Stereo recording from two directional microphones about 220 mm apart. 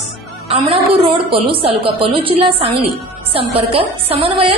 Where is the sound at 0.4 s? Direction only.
25° right (ahead or behind).